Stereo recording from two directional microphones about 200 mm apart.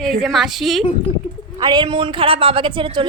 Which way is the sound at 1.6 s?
20° right (ahead or behind).